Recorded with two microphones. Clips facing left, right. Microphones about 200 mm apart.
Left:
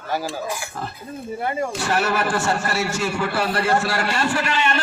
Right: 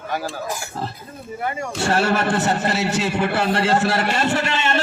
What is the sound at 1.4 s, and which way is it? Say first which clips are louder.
Speech: left 2 dB; 30° left (ahead or behind).